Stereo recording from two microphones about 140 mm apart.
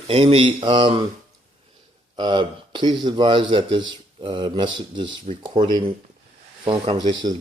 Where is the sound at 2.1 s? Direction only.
35° right (ahead or behind).